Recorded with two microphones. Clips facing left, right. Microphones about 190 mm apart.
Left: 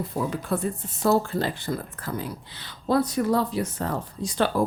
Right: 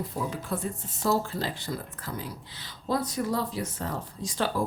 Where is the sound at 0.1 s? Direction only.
55° left (ahead or behind).